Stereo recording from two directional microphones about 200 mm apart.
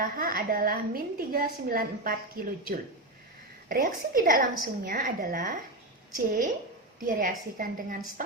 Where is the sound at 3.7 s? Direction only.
45° right (ahead or behind).